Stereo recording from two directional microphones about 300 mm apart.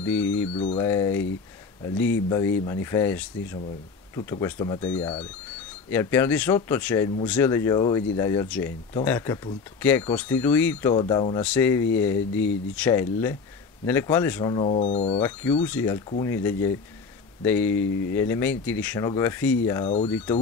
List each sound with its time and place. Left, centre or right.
0.0 s speech: centre
0.6 s speech: centre
0.8 s speech: centre
2.2 s speech: centre
15.1 s speech: centre
17.8 s speech: left
18.1 s speech: centre
20.1 s speech: centre